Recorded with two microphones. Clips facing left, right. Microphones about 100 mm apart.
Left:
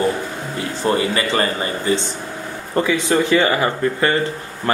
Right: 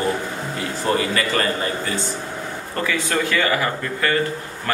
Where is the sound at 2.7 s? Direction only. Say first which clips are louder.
Left 6 dB; 20° left (ahead or behind).